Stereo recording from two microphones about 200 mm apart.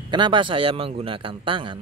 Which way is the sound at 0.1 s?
25° right (ahead or behind).